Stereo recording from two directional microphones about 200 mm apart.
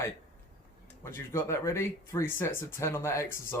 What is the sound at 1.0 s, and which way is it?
Speech, 15° left (ahead or behind).